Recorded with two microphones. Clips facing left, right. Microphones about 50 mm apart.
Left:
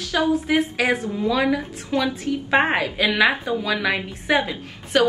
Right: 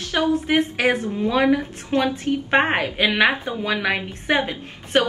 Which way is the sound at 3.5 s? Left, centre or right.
Right.